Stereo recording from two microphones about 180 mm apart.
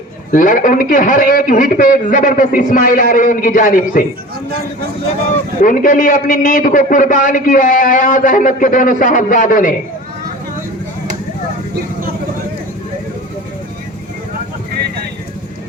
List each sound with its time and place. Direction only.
0.3 s a man's voice: 50° left (ahead or behind)
5.6 s a man's voice: 50° left (ahead or behind)